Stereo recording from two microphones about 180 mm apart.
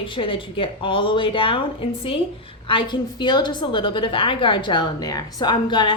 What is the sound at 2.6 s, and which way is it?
A woman's voice, 25° left (ahead or behind).